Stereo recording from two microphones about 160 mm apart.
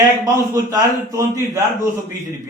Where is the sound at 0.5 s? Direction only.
20° right (ahead or behind).